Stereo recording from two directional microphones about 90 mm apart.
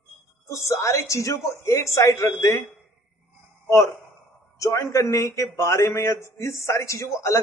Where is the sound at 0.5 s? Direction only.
35° left (ahead or behind).